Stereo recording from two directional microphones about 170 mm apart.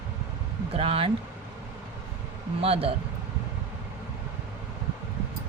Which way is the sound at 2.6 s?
35° right (ahead or behind).